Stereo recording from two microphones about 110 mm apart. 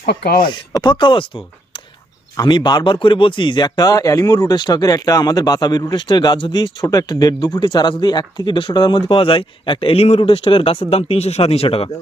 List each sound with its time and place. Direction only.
0.5 s speech: 45° left (ahead or behind)
2.5 s speech: 40° left (ahead or behind); by 11.9 s 65° left (ahead or behind)